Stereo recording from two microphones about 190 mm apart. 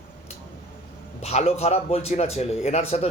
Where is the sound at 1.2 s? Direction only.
35° left (ahead or behind).